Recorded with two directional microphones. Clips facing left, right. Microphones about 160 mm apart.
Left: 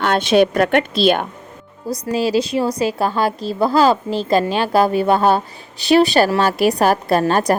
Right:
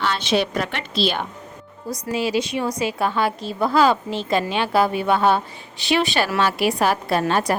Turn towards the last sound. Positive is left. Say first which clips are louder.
# left 5 dB
turn(degrees=40)  # may be behind; listen again after turning